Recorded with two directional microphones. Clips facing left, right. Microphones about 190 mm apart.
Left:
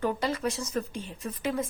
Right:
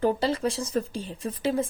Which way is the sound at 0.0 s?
30° right (ahead or behind).